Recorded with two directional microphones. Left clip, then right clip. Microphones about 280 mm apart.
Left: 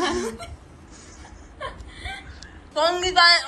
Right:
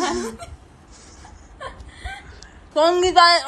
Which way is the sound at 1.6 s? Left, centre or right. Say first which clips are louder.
Left 1 dB; right.